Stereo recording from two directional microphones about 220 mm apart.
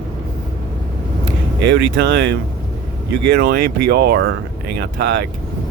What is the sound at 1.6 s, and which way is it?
Speech, 50° right (ahead or behind).